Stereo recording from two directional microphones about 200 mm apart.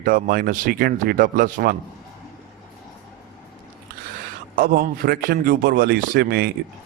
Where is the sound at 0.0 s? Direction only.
45° right (ahead or behind).